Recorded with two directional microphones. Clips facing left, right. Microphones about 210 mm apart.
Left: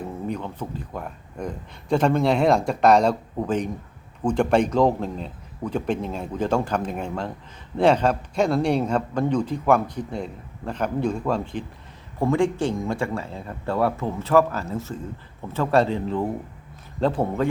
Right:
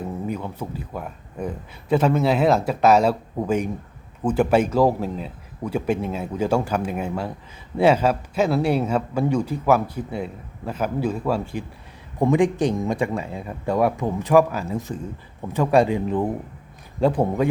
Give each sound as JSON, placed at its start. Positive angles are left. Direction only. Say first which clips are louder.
{"t": 0.3, "sound": "a man's voice", "louder": "right 1 dB", "side_deg": -10}